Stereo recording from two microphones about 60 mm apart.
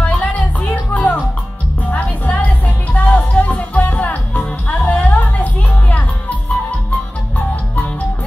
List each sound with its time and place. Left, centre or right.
0.0 s music: left